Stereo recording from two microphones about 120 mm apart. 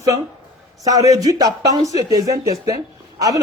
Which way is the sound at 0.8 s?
30° right (ahead or behind).